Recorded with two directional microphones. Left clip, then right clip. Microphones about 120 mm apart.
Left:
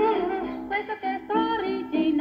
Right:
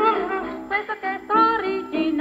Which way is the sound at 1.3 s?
15° left (ahead or behind).